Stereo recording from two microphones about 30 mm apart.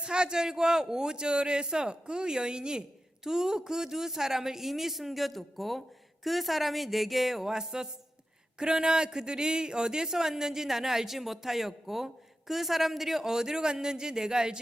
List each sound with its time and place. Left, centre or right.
0.0 s a man's voice: right; by 7.5 s centre
7.5 s a man's voice: right
13.3 s a man's voice: centre